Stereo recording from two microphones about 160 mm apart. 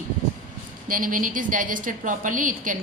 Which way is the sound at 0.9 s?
60° right (ahead or behind).